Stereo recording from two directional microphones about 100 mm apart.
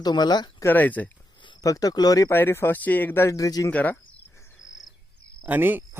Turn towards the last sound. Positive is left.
turn(degrees=-20)  # may be behind; listen again after turning